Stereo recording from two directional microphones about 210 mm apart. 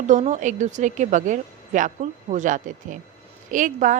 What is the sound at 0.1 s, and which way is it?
A woman's voice, 35° right (ahead or behind).